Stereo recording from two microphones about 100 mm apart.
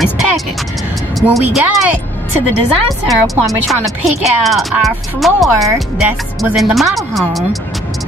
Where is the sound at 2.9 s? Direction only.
Centre (ahead or behind).